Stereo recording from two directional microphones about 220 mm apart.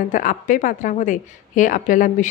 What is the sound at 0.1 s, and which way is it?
A woman's voice, 35° left (ahead or behind).